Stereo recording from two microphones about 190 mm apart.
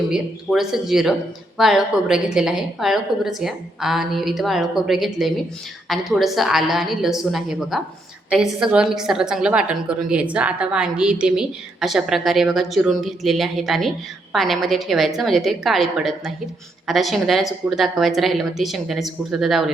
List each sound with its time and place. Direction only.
0.1 s a woman's voice: centre (ahead or behind)